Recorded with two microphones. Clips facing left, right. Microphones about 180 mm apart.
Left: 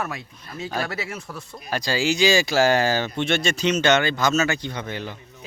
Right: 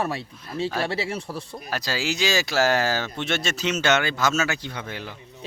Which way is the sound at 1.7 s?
5° right (ahead or behind).